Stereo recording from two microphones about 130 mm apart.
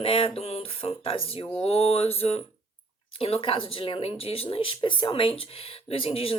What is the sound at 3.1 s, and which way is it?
Speech, 45° left (ahead or behind).